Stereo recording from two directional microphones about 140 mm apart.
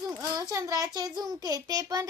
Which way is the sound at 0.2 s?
25° right (ahead or behind).